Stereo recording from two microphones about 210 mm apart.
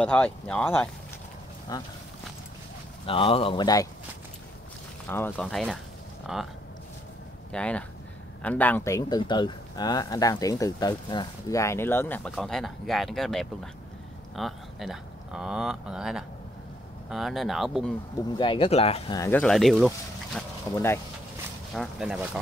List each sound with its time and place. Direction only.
0.0 s speech: 5° left (ahead or behind)
1.7 s speech: 20° left (ahead or behind)
3.1 s speech: 25° left (ahead or behind)
5.0 s speech: 10° left (ahead or behind)
7.5 s speech: 5° left (ahead or behind)
18.4 s speech: 25° left (ahead or behind)
19.1 s speech: 15° left (ahead or behind)
19.4 s speech: centre (ahead or behind)
20.3 s speech: 10° left (ahead or behind)
21.7 s speech: 5° right (ahead or behind)